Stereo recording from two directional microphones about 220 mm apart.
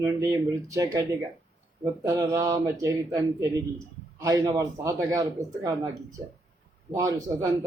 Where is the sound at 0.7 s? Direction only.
15° right (ahead or behind).